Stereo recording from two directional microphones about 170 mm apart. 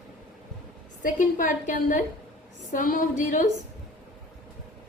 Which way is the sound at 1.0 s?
50° left (ahead or behind).